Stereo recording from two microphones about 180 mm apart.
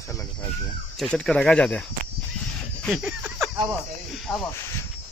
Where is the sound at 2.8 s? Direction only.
Centre (ahead or behind).